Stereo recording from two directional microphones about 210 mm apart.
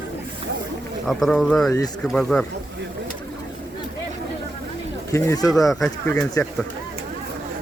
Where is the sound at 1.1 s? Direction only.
Centre (ahead or behind).